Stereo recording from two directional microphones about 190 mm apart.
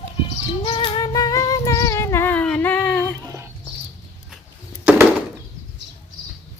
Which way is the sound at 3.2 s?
20° right (ahead or behind).